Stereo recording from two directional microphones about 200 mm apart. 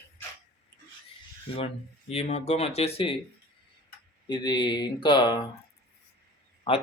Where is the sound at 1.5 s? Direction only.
30° left (ahead or behind).